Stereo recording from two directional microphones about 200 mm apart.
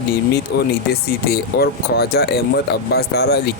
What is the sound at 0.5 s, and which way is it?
Speech, 55° left (ahead or behind).